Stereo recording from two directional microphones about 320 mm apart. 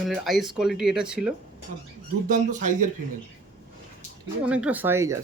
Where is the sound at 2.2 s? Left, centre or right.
Right.